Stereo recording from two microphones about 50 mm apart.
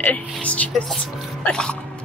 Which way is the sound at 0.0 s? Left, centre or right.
Left.